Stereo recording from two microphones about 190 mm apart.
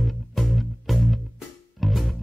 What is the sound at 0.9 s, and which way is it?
Music, centre (ahead or behind).